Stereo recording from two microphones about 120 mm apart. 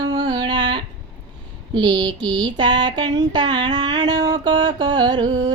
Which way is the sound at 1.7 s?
40° right (ahead or behind).